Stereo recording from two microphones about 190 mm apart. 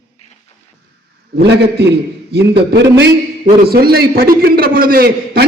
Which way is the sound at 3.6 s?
50° right (ahead or behind).